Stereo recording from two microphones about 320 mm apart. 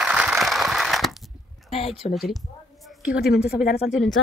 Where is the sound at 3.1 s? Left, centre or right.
Left.